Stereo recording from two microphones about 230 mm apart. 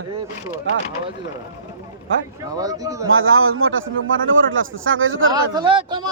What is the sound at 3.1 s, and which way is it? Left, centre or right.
A man's voice, right.